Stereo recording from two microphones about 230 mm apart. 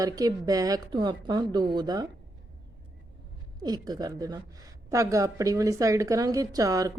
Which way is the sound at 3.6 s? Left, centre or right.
Centre.